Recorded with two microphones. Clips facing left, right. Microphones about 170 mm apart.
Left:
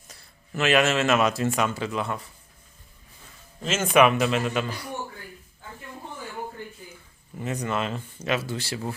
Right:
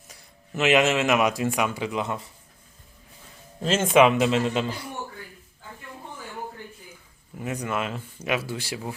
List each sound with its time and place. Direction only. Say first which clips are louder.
0.1 s speech: even; 15° right (ahead or behind)
3.6 s a man's voice: right 1 dB; 30° right (ahead or behind)
7.3 s speech: left 1 dB; 10° right (ahead or behind)